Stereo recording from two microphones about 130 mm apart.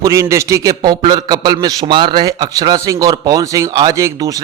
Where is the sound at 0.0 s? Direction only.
25° right (ahead or behind).